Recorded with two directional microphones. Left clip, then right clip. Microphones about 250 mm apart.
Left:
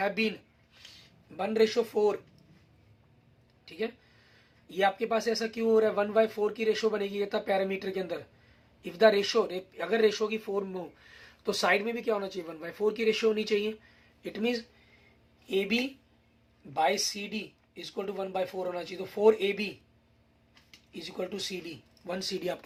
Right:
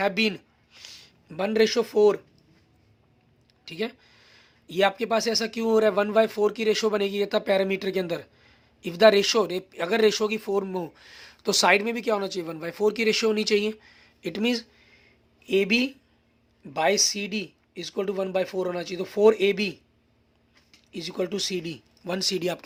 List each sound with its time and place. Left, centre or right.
0.0 s speech: right
3.7 s speech: right
20.9 s speech: right